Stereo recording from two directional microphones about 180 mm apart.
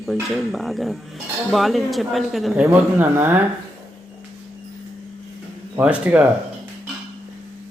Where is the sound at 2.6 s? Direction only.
15° right (ahead or behind).